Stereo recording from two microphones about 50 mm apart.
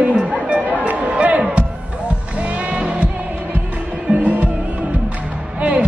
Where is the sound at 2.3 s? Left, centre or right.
Right.